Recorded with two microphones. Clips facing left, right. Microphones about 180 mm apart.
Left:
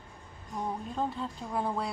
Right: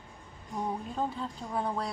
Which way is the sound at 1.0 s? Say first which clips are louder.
Even; centre (ahead or behind).